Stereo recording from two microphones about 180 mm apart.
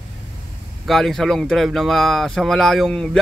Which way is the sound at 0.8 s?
Centre (ahead or behind).